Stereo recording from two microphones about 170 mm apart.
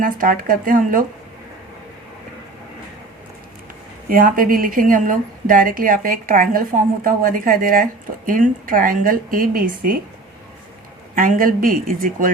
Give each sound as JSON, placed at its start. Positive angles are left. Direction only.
{"t": 0.0, "sound": "speech", "side_deg": -55}
{"t": 4.1, "sound": "speech", "side_deg": -55}
{"t": 11.1, "sound": "speech", "side_deg": -55}